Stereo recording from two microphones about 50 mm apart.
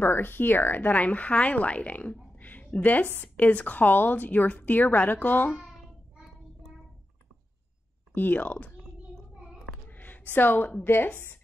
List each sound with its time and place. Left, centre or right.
0.0 s speech: left
8.1 s speech: left
9.4 s child singing: centre
9.8 s a sound: left
10.8 s speech: left